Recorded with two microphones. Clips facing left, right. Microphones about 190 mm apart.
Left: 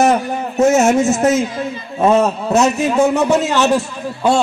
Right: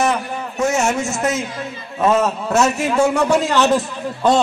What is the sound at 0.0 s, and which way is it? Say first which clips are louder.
Speech: left 5 dB; 40° left (ahead or behind).